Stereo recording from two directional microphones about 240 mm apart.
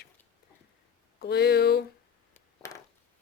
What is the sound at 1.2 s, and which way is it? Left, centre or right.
Speech, left.